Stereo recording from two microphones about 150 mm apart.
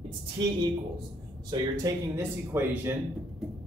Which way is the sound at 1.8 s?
20° right (ahead or behind).